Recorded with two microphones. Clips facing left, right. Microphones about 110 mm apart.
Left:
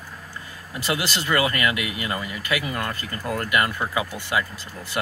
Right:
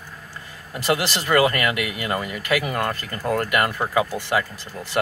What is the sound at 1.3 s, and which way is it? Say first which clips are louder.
Speech: right 4 dB; 45° right (ahead or behind).